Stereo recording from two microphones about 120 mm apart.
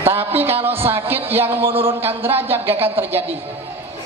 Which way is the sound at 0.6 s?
20° right (ahead or behind).